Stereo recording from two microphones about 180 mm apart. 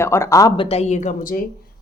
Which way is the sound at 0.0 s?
15° left (ahead or behind).